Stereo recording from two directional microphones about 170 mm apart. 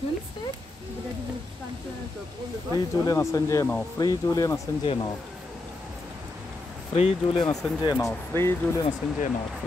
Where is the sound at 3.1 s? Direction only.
20° left (ahead or behind).